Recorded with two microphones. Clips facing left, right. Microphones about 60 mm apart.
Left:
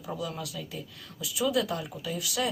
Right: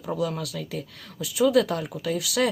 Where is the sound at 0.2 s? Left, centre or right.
Right.